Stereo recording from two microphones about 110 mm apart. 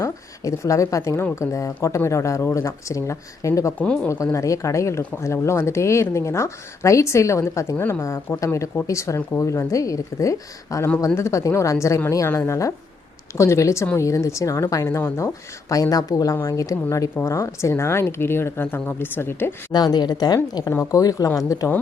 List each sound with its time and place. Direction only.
0.0 s speech: 30° left (ahead or behind)
3.8 s speech: 10° left (ahead or behind)
4.1 s speech: 25° left (ahead or behind)
19.7 s speech: 40° left (ahead or behind)